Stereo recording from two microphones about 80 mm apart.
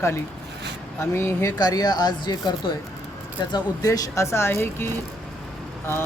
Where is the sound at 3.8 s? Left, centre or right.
Left.